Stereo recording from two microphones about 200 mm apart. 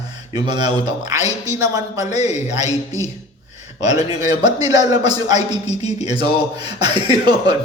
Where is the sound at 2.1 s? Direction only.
35° left (ahead or behind).